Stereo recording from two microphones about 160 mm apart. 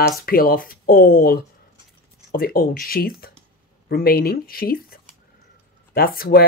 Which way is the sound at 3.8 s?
70° left (ahead or behind).